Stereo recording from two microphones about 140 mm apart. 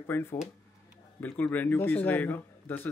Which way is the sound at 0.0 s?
20° left (ahead or behind).